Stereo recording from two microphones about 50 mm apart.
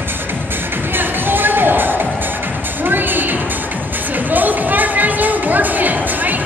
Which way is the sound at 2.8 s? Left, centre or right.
Right.